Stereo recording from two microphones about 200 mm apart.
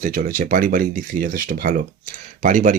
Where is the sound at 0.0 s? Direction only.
45° right (ahead or behind).